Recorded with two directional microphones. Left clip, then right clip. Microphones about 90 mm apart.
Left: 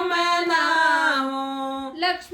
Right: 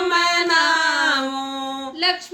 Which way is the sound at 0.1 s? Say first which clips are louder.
Right 4 dB; 15° right (ahead or behind).